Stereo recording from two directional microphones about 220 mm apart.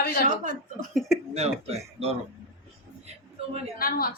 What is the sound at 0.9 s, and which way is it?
Speech, centre (ahead or behind).